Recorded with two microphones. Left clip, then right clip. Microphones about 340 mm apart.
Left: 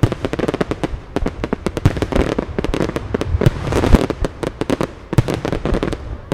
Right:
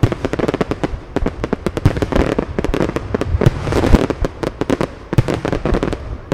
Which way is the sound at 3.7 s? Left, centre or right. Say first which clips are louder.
Right 1 dB; centre.